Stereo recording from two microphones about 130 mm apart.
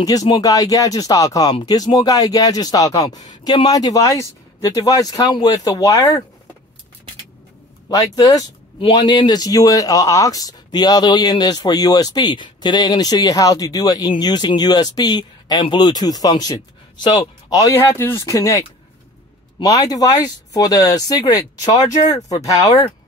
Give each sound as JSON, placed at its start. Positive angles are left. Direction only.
{"t": 0.0, "sound": "speech", "side_deg": 30}
{"t": 7.9, "sound": "speech", "side_deg": 30}
{"t": 8.7, "sound": "speech", "side_deg": 40}
{"t": 17.7, "sound": "speech", "side_deg": 20}
{"t": 19.6, "sound": "speech", "side_deg": 25}